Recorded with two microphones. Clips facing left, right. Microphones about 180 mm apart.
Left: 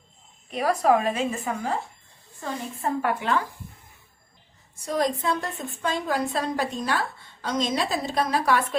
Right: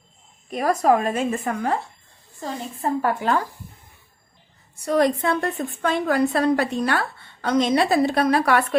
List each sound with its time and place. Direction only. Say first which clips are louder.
0.5 s speech: right 2 dB; 45° right (ahead or behind); by 1.8 s 60° right (ahead or behind)
2.4 s a woman's voice: right 2 dB; 35° right (ahead or behind)
4.9 s a woman's voice: right 5 dB; 65° right (ahead or behind)